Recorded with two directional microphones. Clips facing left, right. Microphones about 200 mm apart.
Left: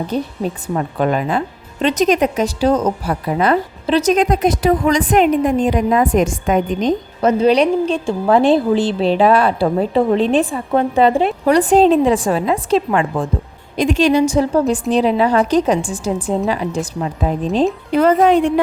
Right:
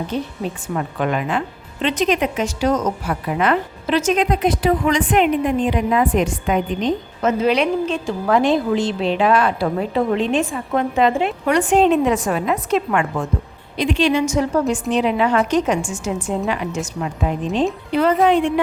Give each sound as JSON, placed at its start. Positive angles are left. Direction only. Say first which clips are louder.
{"t": 0.1, "sound": "a woman's voice", "louder": "left 4 dB", "side_deg": 35}
{"t": 13.7, "sound": "a woman's voice", "louder": "left 4 dB", "side_deg": 45}